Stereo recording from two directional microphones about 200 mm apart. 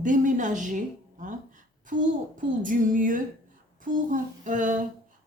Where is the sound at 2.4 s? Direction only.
40° right (ahead or behind).